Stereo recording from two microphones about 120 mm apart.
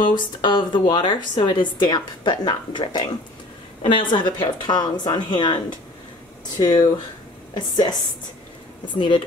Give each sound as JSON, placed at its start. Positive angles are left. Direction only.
{"t": 0.0, "sound": "speech", "side_deg": 40}